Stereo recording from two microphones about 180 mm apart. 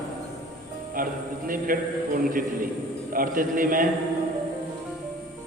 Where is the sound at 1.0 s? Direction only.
50° right (ahead or behind).